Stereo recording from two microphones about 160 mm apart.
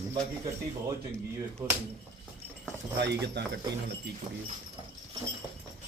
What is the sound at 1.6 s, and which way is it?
Speech, 20° right (ahead or behind).